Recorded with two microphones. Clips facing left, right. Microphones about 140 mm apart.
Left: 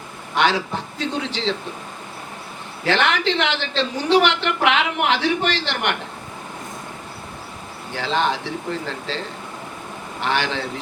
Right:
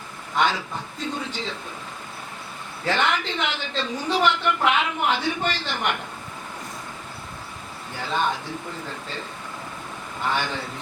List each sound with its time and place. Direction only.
0.3 s a woman's voice: 80° left
2.8 s a woman's voice: 80° left
7.9 s a woman's voice: 85° left